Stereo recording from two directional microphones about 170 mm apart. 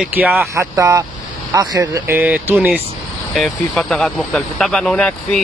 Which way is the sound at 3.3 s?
Centre (ahead or behind).